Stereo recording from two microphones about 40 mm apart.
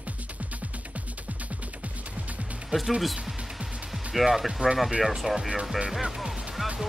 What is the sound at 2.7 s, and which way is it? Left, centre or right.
Speech, right.